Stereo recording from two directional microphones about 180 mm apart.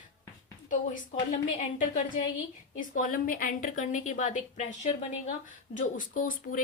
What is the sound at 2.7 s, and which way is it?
A woman's voice, 50° left (ahead or behind).